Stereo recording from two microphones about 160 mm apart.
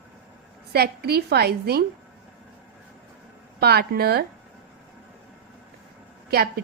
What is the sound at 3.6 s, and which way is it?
Speech, 85° right.